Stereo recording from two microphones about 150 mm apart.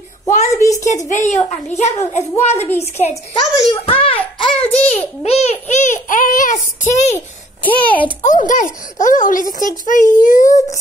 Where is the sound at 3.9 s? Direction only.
35° left (ahead or behind).